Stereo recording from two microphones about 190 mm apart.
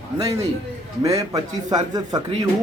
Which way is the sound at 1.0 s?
20° right (ahead or behind).